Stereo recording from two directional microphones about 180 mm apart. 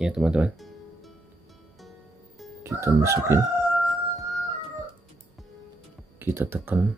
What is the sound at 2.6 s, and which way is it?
Speech, 15° right (ahead or behind).